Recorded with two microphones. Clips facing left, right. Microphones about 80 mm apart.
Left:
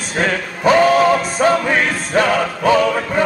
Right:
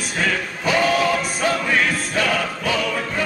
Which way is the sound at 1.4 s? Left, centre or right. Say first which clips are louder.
Left 5 dB; left.